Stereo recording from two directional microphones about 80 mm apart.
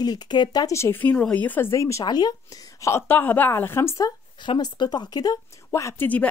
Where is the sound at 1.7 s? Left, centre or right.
Left.